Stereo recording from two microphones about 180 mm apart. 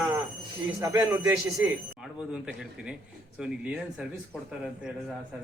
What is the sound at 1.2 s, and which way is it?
Speech, 5° right (ahead or behind).